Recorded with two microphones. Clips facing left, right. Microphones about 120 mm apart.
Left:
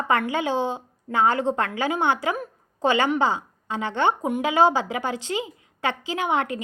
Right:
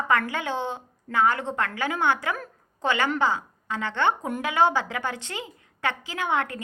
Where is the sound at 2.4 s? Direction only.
15° left (ahead or behind).